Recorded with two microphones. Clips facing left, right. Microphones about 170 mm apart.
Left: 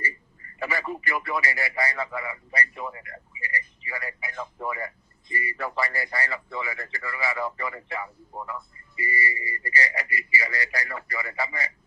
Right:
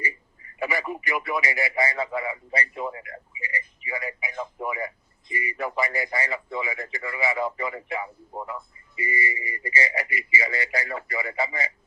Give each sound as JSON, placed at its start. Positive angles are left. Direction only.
{"t": 0.6, "sound": "speech", "side_deg": -15}